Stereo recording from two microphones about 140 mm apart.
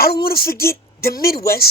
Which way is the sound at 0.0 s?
90° left.